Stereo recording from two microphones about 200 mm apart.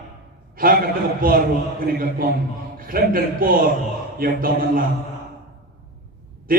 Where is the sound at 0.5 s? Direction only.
45° right (ahead or behind).